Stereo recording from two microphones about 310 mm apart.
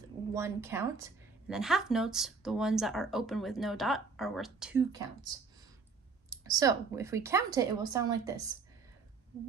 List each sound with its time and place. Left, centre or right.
0.3 s a woman's voice: centre